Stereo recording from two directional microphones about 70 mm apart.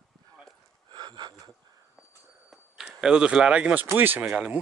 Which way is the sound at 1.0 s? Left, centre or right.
Right.